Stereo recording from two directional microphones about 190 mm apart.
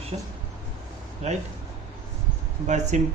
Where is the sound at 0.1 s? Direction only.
30° right (ahead or behind).